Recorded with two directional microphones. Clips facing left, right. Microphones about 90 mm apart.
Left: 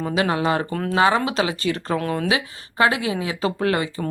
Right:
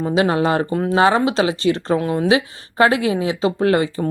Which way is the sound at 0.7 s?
20° right (ahead or behind).